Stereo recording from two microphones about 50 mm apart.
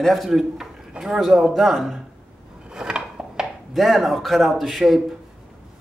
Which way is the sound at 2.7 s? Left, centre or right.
Centre.